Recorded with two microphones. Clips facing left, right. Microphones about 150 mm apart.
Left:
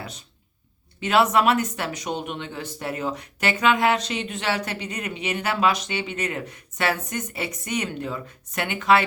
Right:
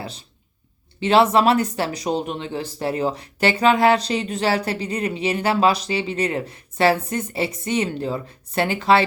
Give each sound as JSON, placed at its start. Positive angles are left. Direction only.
{"t": 0.0, "sound": "speech", "side_deg": -30}